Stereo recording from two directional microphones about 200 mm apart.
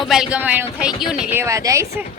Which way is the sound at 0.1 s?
5° right (ahead or behind).